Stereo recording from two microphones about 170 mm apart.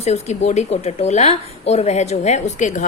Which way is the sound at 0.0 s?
40° left (ahead or behind).